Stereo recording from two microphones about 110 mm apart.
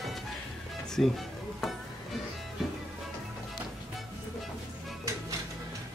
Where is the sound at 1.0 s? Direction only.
5° left (ahead or behind).